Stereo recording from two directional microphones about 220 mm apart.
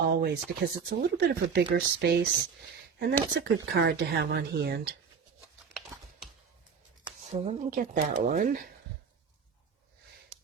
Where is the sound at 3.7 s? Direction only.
45° right (ahead or behind).